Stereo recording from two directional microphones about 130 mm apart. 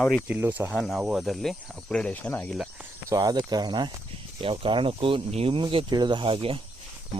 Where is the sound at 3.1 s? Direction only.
30° right (ahead or behind).